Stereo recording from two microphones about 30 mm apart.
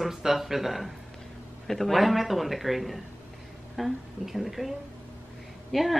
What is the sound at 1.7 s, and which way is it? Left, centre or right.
Speech, centre.